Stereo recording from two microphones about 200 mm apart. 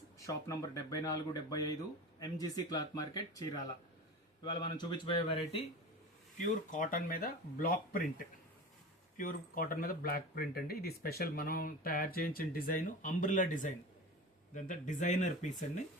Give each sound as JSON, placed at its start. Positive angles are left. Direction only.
{"t": 0.2, "sound": "speech", "side_deg": 15}
{"t": 6.4, "sound": "speech", "side_deg": 45}
{"t": 9.1, "sound": "speech", "side_deg": 45}